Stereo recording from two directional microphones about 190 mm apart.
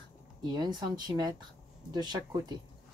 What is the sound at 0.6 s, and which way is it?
A woman's voice, 20° right (ahead or behind).